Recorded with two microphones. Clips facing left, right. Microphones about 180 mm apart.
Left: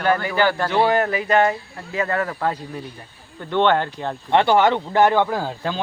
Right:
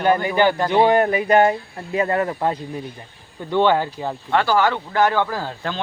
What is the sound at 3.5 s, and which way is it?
Speech, 10° right (ahead or behind).